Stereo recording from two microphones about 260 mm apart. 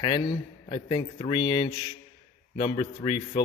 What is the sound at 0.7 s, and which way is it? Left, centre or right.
A man's voice, centre.